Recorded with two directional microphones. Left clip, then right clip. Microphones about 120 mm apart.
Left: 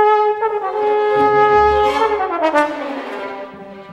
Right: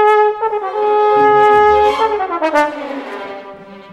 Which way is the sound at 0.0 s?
25° right (ahead or behind).